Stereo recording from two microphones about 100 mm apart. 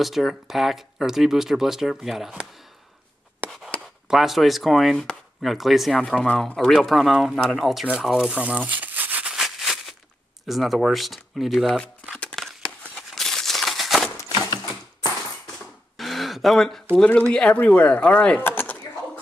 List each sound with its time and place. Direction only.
0.0 s speech: centre (ahead or behind)
3.4 s chopping: centre (ahead or behind)
7.3 s speech: centre (ahead or behind); by 9.3 s 15° right (ahead or behind)
9.3 s a sound: centre (ahead or behind)
10.4 s speech: centre (ahead or behind)
12.2 s a sound: 10° left (ahead or behind)
14.1 s a sound: 35° left (ahead or behind)
16.0 s gasp: centre (ahead or behind)
16.9 s speech: 10° left (ahead or behind)